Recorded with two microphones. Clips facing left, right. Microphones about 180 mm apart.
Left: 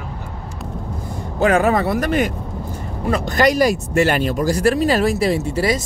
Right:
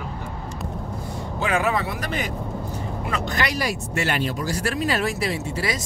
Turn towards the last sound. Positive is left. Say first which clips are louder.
# left 8 dB
turn(degrees=35)  # may be behind; listen again after turning